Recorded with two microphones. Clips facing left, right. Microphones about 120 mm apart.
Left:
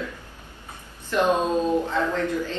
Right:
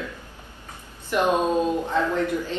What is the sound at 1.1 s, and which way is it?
A woman's voice, 15° right (ahead or behind).